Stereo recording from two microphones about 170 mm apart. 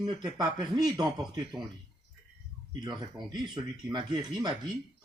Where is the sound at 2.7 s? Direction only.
25° right (ahead or behind).